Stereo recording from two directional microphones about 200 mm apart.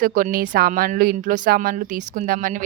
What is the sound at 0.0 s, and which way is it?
A woman's voice, 45° right (ahead or behind).